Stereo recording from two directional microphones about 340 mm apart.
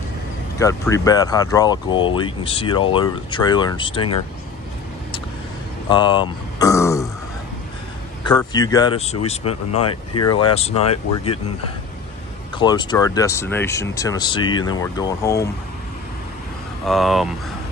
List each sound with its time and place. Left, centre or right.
0.6 s speech: centre
5.9 s speech: centre
8.3 s speech: centre
9.7 s speech: left
10.3 s speech: centre
12.5 s speech: centre
16.8 s speech: centre